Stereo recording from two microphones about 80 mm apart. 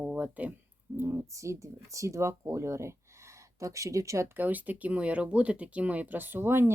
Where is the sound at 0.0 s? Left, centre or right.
Centre.